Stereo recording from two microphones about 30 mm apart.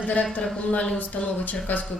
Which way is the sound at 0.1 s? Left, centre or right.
Left.